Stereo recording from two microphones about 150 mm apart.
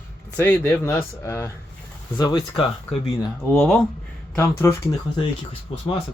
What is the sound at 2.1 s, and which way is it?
Speech, 30° left (ahead or behind).